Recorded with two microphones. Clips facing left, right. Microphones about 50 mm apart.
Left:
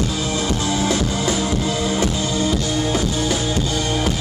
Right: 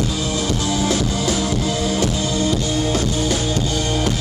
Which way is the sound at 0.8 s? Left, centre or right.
Centre.